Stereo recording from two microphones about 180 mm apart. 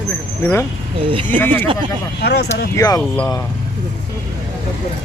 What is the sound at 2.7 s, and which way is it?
Speech, 20° left (ahead or behind).